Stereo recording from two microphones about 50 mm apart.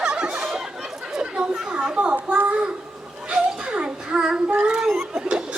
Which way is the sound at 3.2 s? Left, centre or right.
Centre.